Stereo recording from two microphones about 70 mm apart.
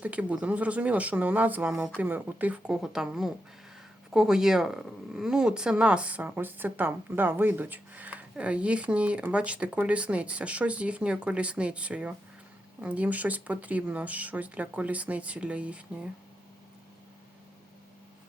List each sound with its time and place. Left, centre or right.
0.0 s speech: centre
2.6 s speech: centre